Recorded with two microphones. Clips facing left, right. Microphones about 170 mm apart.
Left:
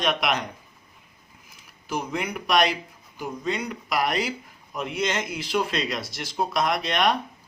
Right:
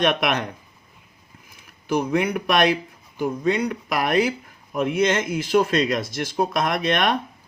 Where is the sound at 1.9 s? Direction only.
55° right (ahead or behind).